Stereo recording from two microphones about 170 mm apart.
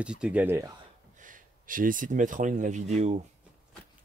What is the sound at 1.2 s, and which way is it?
Speech, 50° right (ahead or behind).